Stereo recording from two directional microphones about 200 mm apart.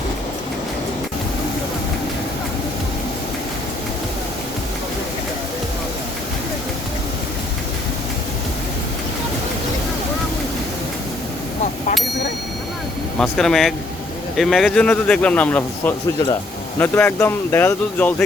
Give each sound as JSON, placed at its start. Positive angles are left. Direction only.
{"t": 13.1, "sound": "speech", "side_deg": 5}